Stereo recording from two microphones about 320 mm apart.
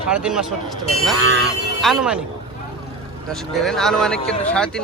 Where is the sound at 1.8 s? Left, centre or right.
Centre.